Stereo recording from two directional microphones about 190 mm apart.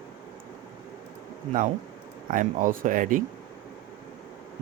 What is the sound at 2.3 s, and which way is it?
Speech, 45° right (ahead or behind).